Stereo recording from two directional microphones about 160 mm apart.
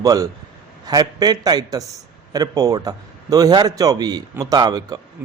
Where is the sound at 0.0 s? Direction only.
20° right (ahead or behind).